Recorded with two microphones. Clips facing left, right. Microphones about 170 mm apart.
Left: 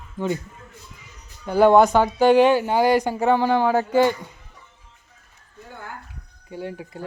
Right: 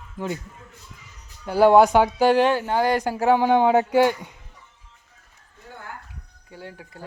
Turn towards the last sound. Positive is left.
turn(degrees=20)  # may be behind; listen again after turning